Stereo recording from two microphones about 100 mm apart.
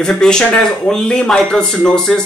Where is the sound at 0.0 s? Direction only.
5° left (ahead or behind).